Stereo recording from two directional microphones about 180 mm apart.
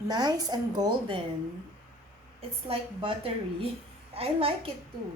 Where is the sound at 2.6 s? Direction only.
30° right (ahead or behind).